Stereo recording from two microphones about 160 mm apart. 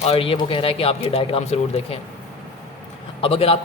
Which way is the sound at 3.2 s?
40° left (ahead or behind).